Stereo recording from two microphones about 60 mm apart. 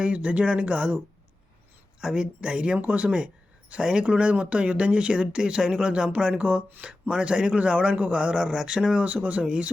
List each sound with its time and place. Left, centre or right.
0.0 s speech: right
2.0 s a man's voice: centre